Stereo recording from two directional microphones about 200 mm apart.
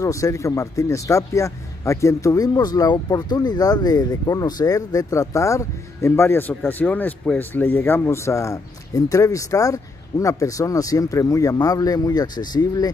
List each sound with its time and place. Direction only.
0.0 s a man's voice: 15° left (ahead or behind)